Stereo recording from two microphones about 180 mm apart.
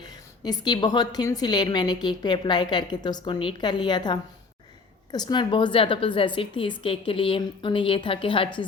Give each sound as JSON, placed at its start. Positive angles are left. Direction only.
{"t": 0.0, "sound": "a woman's voice", "side_deg": 20}